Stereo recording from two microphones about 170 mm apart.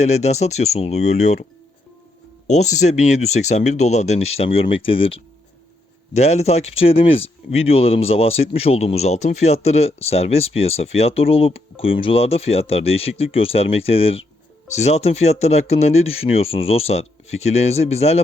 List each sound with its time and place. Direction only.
0.0 s speech: 40° left (ahead or behind)
2.5 s speech: 45° left (ahead or behind)